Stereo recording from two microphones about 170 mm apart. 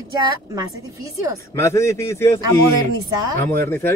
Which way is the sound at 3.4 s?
15° left (ahead or behind).